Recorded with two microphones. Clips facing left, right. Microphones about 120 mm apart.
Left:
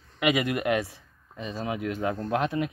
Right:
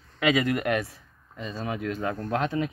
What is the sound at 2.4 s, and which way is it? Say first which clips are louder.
Speech: even; 10° left (ahead or behind).